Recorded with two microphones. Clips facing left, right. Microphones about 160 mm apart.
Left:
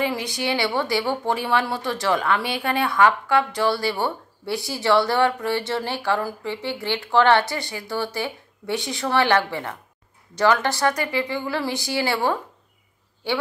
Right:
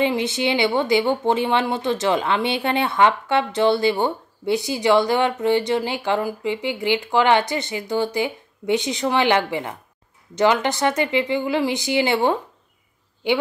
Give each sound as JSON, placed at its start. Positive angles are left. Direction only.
{"t": 0.0, "sound": "a woman's voice", "side_deg": -25}